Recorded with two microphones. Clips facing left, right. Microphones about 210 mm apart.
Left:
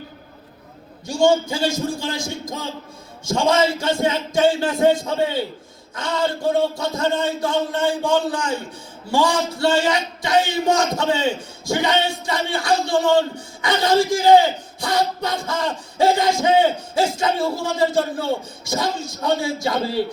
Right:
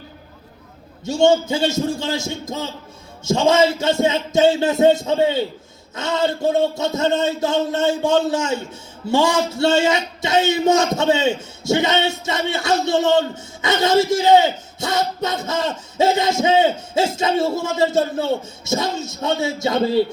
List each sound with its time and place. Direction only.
1.0 s a man's voice: 25° right (ahead or behind)